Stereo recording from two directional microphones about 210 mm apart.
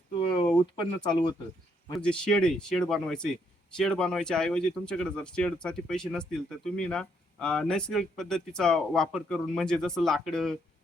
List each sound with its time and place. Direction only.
0.8 s speech: 20° left (ahead or behind)
2.0 s speech: 5° left (ahead or behind)